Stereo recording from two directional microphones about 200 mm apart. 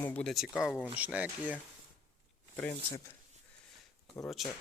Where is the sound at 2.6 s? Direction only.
10° left (ahead or behind).